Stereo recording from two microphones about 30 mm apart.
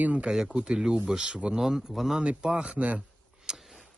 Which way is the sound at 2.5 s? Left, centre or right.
Right.